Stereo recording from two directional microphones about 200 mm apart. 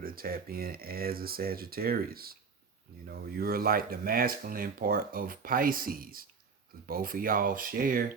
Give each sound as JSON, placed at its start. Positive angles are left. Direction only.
{"t": 0.0, "sound": "speech", "side_deg": -45}